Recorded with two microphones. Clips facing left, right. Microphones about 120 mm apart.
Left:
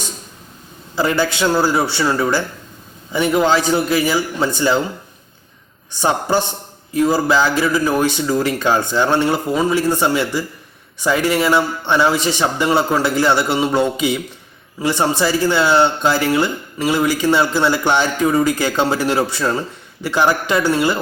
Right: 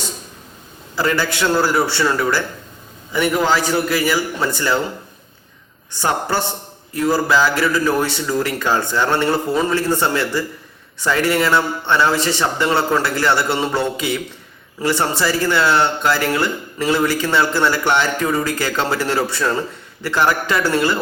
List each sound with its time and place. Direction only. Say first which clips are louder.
0.9 s a man's voice: left 2 dB; 20° left (ahead or behind)
5.9 s a man's voice: left 3 dB; 20° left (ahead or behind)